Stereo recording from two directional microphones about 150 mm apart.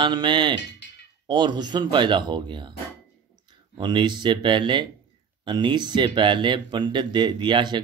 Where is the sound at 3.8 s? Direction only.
30° right (ahead or behind).